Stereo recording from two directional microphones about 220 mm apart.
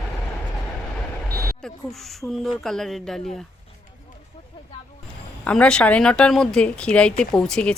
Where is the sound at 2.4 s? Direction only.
Centre (ahead or behind).